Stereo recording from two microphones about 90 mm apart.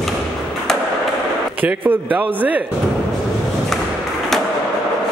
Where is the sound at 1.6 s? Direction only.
20° right (ahead or behind).